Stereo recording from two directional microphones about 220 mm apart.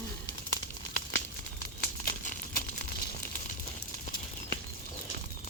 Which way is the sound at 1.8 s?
40° left (ahead or behind).